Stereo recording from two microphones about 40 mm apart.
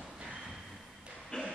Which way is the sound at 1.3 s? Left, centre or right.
Left.